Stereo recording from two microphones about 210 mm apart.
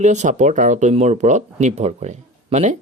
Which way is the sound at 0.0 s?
35° right (ahead or behind).